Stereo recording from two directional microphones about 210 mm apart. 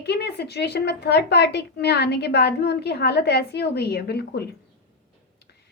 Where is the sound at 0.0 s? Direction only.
50° left (ahead or behind).